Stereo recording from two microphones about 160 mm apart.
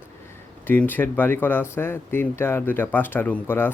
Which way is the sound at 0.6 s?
10° left (ahead or behind).